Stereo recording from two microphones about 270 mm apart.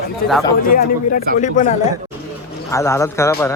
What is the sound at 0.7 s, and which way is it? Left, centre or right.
Speech, left.